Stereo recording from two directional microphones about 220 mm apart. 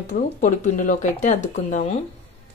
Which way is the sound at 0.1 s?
35° left (ahead or behind).